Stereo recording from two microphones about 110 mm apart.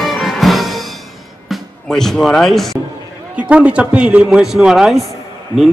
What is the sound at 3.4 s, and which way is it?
A man's voice, 10° right (ahead or behind).